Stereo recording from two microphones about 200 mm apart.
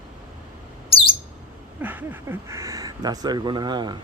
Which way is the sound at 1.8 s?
10° right (ahead or behind).